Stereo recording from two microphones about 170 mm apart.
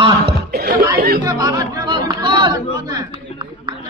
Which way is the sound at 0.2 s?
65° right (ahead or behind).